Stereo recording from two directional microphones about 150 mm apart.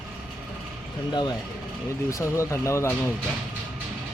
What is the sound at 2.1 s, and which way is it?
Speech, 20° left (ahead or behind).